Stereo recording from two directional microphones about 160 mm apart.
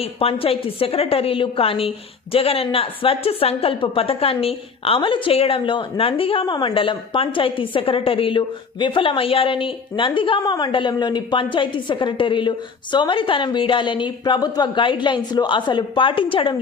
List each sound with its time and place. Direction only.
0.0 s a woman's voice: 35° left (ahead or behind)